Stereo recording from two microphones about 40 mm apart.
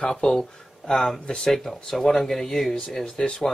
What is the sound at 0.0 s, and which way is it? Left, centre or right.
Speech, centre.